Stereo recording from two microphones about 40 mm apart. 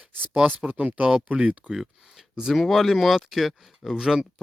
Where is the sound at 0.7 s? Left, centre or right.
Right.